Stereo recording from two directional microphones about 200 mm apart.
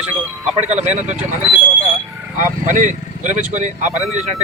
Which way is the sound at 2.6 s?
40° right (ahead or behind).